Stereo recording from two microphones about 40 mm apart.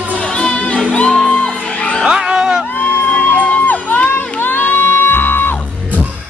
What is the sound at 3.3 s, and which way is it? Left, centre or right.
Music, left.